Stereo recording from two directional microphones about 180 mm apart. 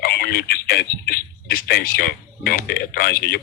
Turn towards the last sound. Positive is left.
turn(degrees=65)  # may be behind; listen again after turning